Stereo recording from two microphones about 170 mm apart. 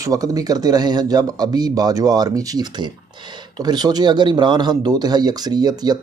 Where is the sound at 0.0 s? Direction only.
20° right (ahead or behind).